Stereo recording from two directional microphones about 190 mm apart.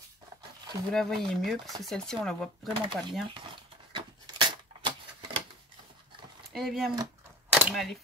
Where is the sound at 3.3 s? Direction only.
25° right (ahead or behind).